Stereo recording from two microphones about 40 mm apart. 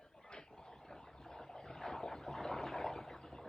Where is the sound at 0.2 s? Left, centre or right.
Left.